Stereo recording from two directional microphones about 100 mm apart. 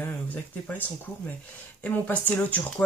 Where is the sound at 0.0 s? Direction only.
15° left (ahead or behind).